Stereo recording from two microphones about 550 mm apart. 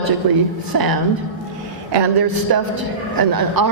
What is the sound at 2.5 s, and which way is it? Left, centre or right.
Speech, right.